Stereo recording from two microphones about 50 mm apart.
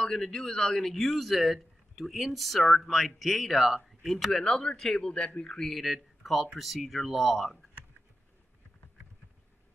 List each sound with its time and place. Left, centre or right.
0.0 s speech: centre